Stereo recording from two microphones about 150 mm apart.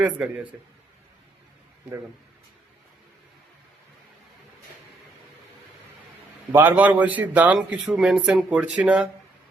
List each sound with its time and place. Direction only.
0.0 s a man's voice: 10° right (ahead or behind)
6.5 s a man's voice: 15° right (ahead or behind)